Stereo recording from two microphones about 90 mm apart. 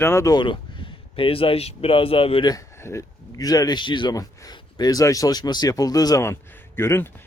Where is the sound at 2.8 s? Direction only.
30° left (ahead or behind).